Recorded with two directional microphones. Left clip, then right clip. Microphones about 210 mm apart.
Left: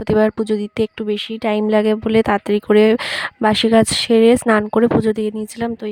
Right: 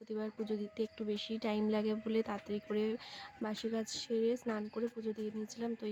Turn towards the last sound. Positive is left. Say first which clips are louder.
# left 18 dB
turn(degrees=50)  # may be behind; listen again after turning